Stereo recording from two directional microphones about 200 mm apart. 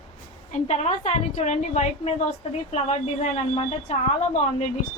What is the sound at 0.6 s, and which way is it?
A woman's voice, 35° left (ahead or behind).